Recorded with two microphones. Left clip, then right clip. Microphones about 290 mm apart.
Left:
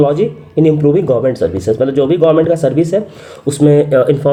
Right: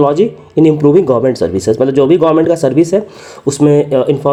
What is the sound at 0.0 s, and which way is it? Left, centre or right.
Speech, right.